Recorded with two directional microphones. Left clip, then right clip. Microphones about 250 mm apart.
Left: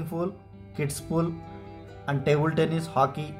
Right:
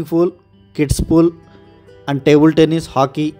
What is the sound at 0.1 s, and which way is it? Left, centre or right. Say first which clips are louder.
Speech: right 16 dB; right.